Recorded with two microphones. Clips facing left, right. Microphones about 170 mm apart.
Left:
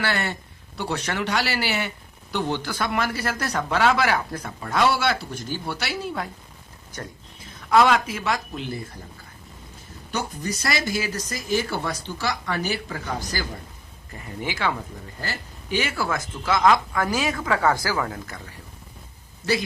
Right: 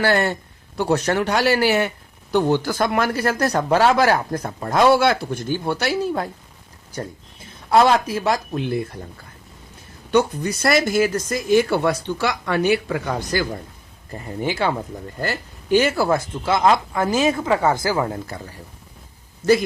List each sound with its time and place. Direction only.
0.0 s speech: 45° right (ahead or behind)
7.7 s speech: 35° right (ahead or behind)
10.1 s speech: 60° right (ahead or behind)
14.1 s speech: 30° right (ahead or behind)
15.2 s speech: 60° right (ahead or behind)
15.8 s speech: 40° right (ahead or behind)